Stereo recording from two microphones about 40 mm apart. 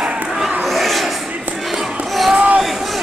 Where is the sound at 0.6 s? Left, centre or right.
Centre.